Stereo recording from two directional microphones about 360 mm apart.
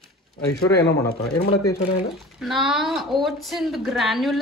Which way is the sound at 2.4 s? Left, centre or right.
Centre.